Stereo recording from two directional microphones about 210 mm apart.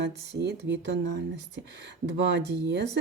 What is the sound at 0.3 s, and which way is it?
Speech, 55° right (ahead or behind).